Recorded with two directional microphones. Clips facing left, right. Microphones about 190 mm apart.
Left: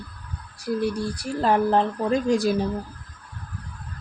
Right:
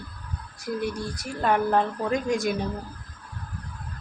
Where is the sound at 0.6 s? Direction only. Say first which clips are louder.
Left 4 dB; 30° left (ahead or behind).